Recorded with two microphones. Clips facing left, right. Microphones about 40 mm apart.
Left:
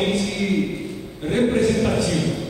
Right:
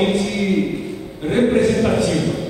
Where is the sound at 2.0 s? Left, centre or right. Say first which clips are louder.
Right 3 dB; centre.